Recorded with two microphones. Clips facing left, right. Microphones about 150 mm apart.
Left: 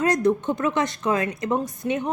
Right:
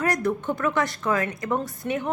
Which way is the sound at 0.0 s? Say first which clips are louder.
Left 4 dB; 20° left (ahead or behind).